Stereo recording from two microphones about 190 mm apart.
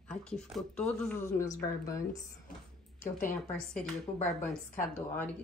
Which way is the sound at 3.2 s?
45° left (ahead or behind).